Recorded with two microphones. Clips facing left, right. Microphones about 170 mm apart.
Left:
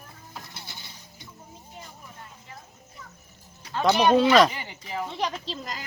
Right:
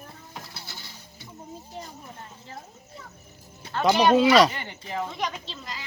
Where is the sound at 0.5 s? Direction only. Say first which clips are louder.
Right 1 dB; 20° left (ahead or behind).